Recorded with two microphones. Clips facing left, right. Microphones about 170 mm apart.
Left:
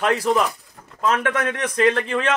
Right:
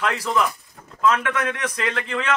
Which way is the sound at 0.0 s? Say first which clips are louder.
Left 3 dB; 40° left (ahead or behind).